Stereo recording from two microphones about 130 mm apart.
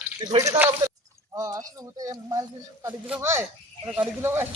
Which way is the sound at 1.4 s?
25° right (ahead or behind).